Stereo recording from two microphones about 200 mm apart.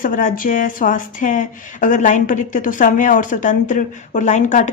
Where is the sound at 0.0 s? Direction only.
40° left (ahead or behind).